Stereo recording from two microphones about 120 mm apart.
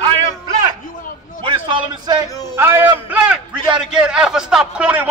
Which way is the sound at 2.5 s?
20° right (ahead or behind).